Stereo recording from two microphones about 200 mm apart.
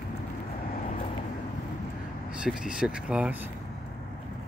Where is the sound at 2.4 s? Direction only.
5° right (ahead or behind).